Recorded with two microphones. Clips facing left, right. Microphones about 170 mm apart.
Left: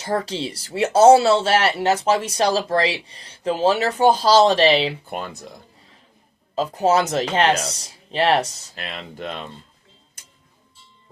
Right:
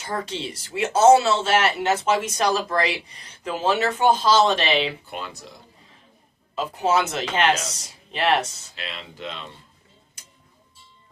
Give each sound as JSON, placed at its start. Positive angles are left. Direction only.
{"t": 0.0, "sound": "speech", "side_deg": 35}
{"t": 5.0, "sound": "speech", "side_deg": 50}
{"t": 6.6, "sound": "speech", "side_deg": 40}